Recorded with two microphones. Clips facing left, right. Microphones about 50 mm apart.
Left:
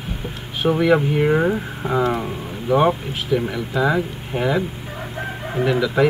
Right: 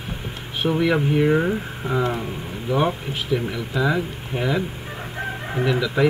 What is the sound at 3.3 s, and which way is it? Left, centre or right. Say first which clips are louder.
Speech: left 3 dB; left.